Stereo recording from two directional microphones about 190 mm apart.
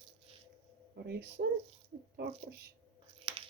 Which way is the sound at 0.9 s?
60° right (ahead or behind).